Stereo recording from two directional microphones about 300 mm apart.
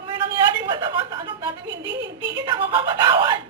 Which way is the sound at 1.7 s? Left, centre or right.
Right.